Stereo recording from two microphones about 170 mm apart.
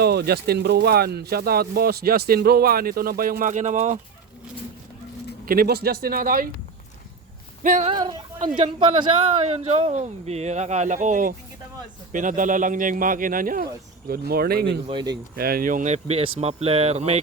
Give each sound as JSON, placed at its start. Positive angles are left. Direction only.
{"t": 0.0, "sound": "speech", "side_deg": -70}
{"t": 5.5, "sound": "speech", "side_deg": -65}
{"t": 7.6, "sound": "a sound", "side_deg": -50}
{"t": 8.5, "sound": "a man's voice", "side_deg": -30}
{"t": 14.1, "sound": "speech", "side_deg": -65}
{"t": 14.8, "sound": "speech", "side_deg": -25}
{"t": 15.1, "sound": "a man's voice", "side_deg": -60}